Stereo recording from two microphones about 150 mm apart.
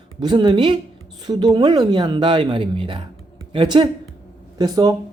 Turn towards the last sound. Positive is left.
turn(degrees=-25)  # may be behind; listen again after turning